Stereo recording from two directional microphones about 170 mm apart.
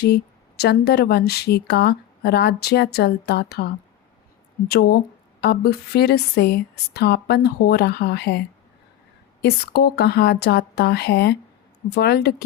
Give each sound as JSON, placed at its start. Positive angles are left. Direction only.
{"t": 0.6, "sound": "a woman's voice", "side_deg": 70}
{"t": 4.7, "sound": "a woman's voice", "side_deg": 70}